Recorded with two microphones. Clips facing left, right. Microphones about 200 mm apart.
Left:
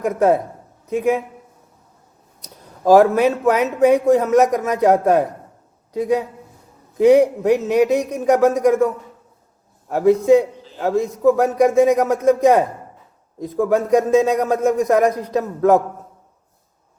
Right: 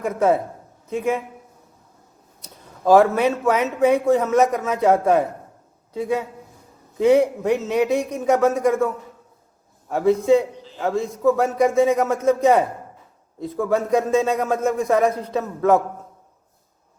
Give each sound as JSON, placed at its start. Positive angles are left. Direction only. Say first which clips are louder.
{"t": 0.0, "sound": "speech", "louder": "left 3 dB", "side_deg": 15}
{"t": 2.4, "sound": "speech", "louder": "left 2 dB", "side_deg": 15}
{"t": 9.9, "sound": "speech", "louder": "left 3 dB", "side_deg": 15}